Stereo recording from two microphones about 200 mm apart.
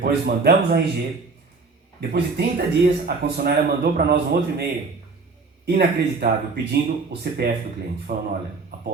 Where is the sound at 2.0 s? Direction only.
55° right (ahead or behind).